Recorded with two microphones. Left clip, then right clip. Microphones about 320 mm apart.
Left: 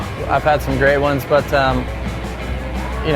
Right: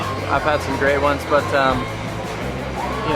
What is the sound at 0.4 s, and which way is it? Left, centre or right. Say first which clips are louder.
Speech: left 5 dB; left.